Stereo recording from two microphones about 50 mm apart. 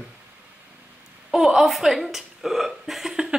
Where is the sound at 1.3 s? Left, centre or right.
Centre.